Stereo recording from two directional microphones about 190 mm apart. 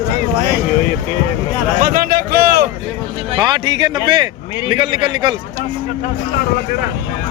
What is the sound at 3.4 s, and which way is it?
A man's voice, 20° right (ahead or behind).